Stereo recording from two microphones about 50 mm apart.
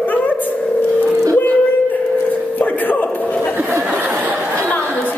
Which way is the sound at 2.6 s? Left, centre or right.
Left.